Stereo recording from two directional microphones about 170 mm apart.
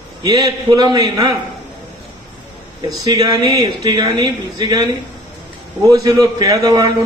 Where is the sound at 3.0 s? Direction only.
25° right (ahead or behind).